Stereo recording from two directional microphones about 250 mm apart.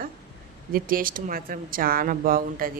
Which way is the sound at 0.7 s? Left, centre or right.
Right.